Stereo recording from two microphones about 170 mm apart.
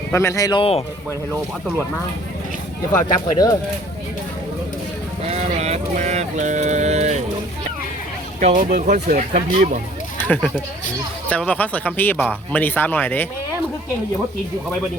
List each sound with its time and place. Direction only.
0.1 s speech: 15° left (ahead or behind)
0.6 s speech: 35° left (ahead or behind)
3.0 s speech: 20° left (ahead or behind)
5.3 s a sound: 40° right (ahead or behind)
8.4 s speech: 45° right (ahead or behind)
8.7 s speech: 65° right (ahead or behind)
9.1 s speech: 40° right (ahead or behind)
10.2 s speech: 10° left (ahead or behind)